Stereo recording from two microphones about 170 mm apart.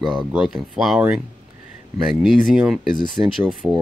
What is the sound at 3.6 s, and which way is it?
Speech, 15° right (ahead or behind).